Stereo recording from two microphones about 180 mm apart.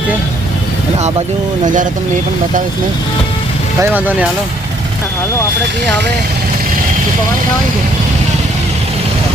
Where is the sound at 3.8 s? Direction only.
10° right (ahead or behind).